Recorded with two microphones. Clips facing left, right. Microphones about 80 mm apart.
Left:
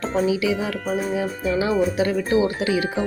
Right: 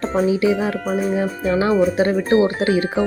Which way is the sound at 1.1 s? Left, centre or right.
Right.